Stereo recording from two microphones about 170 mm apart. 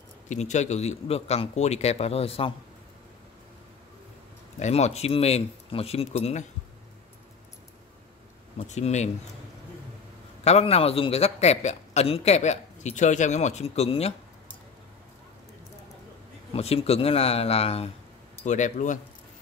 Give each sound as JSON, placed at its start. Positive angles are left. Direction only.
{"t": 0.3, "sound": "a man's voice", "side_deg": 45}
{"t": 4.6, "sound": "a man's voice", "side_deg": 40}
{"t": 8.5, "sound": "speech", "side_deg": 40}
{"t": 10.4, "sound": "a man's voice", "side_deg": 35}
{"t": 16.5, "sound": "a man's voice", "side_deg": 35}